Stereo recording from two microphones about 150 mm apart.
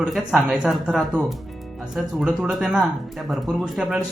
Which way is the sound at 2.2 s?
5° right (ahead or behind).